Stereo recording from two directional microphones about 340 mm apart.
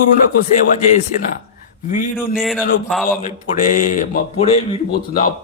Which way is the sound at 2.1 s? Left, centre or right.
Centre.